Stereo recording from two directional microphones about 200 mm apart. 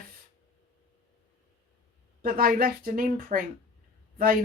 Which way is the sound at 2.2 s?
45° right (ahead or behind).